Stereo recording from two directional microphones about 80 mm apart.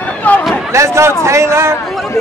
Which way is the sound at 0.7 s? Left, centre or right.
Right.